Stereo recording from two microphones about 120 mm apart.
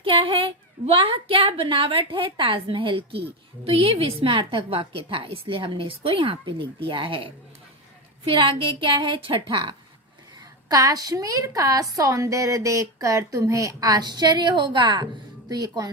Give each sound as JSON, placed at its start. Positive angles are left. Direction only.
{"t": 0.0, "sound": "a woman's voice", "side_deg": -45}
{"t": 8.3, "sound": "a woman's voice", "side_deg": -45}
{"t": 10.7, "sound": "a woman's voice", "side_deg": -30}